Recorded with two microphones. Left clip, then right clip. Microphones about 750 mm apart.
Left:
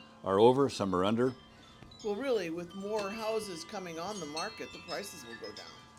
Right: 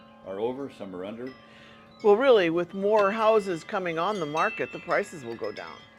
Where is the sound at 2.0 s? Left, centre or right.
Right.